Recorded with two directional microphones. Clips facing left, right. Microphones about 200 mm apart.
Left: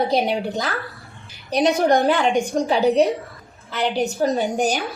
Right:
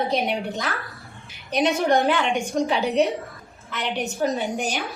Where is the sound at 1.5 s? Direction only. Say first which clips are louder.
Left 3 dB; 40° left (ahead or behind).